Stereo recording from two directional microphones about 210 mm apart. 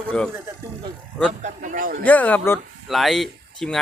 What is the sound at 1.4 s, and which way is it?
Speech, 35° right (ahead or behind).